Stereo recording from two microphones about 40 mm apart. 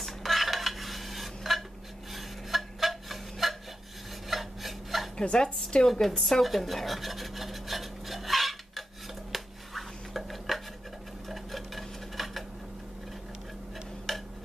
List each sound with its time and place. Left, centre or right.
0.0 s dishes: centre
2.1 s rub: centre
4.3 s filing: centre
5.1 s speech: left
5.9 s a woman's voice: centre
6.4 s rub: centre
9.3 s finger snapping: centre
11.2 s dishes: centre
14.1 s tick-tock: centre